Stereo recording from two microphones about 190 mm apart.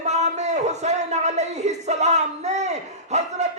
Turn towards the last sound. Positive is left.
turn(degrees=-35)  # may be behind; listen again after turning